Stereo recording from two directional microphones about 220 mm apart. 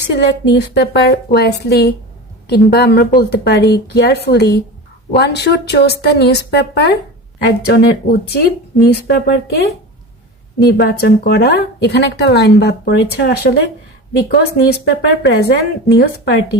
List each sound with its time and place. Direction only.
0.1 s speech: 50° left (ahead or behind)
10.6 s speech: 45° left (ahead or behind)